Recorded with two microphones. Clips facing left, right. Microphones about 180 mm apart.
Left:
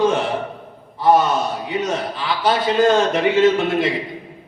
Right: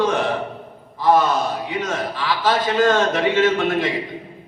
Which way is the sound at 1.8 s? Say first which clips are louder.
Left 1 dB; 20° left (ahead or behind).